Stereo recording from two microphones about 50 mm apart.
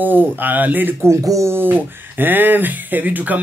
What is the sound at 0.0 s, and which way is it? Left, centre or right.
Speech, right.